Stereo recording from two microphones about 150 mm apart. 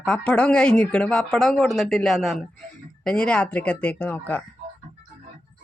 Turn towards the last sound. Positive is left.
turn(degrees=10)  # may be behind; listen again after turning